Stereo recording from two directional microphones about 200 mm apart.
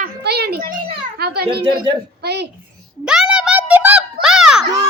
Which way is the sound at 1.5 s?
25° right (ahead or behind).